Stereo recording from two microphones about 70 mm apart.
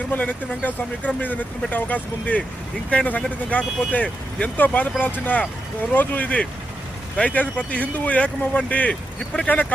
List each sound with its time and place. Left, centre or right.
0.1 s speech: left